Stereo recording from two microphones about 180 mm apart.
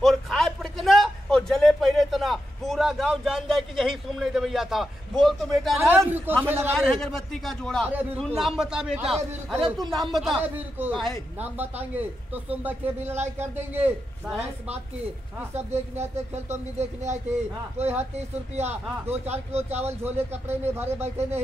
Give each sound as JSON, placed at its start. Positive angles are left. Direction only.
{"t": 0.0, "sound": "a sound", "side_deg": 0}
{"t": 6.4, "sound": "speech", "side_deg": -10}
{"t": 6.8, "sound": "a man's voice", "side_deg": 0}
{"t": 7.9, "sound": "a man's voice", "side_deg": -10}
{"t": 11.3, "sound": "speech", "side_deg": -10}
{"t": 15.5, "sound": "speech", "side_deg": -35}
{"t": 20.7, "sound": "speech", "side_deg": -15}